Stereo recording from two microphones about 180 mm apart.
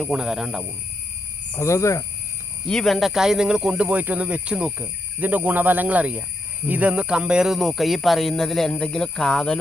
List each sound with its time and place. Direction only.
0.0 s speech: 5° right (ahead or behind)
1.5 s speech: 15° left (ahead or behind)
2.6 s speech: centre (ahead or behind)